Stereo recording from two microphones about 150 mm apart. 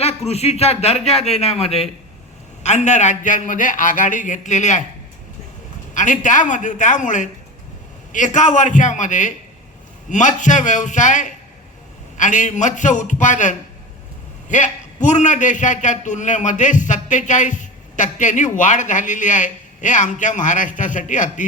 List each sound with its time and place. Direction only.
0.3 s a man's voice: 45° left (ahead or behind)
5.9 s a man's voice: 55° left (ahead or behind)